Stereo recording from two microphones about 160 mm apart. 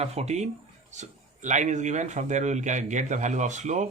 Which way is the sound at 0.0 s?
40° right (ahead or behind).